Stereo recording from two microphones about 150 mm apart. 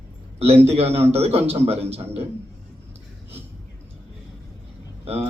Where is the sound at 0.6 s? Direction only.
45° right (ahead or behind).